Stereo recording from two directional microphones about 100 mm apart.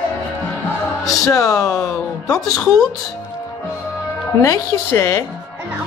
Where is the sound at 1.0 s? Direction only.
35° left (ahead or behind).